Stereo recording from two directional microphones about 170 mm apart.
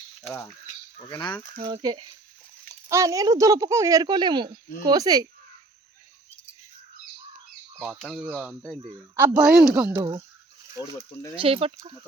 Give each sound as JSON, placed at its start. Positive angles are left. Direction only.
{"t": 0.2, "sound": "speech", "side_deg": 0}
{"t": 0.9, "sound": "speech", "side_deg": 25}
{"t": 1.6, "sound": "speech", "side_deg": -25}
{"t": 7.9, "sound": "speech", "side_deg": 0}
{"t": 9.9, "sound": "speech", "side_deg": -25}
{"t": 11.3, "sound": "speech", "side_deg": -35}